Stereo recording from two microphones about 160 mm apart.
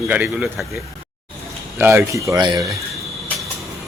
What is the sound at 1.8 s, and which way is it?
Speech, 15° right (ahead or behind).